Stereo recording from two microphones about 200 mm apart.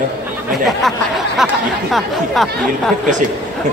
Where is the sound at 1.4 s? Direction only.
Centre (ahead or behind).